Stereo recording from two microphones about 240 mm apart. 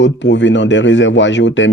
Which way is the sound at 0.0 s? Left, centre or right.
Left.